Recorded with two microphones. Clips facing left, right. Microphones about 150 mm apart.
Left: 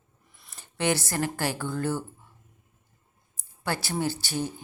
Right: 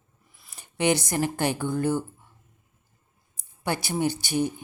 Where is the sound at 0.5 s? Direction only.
15° right (ahead or behind).